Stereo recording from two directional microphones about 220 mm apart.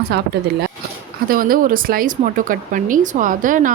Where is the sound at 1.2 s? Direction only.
40° right (ahead or behind).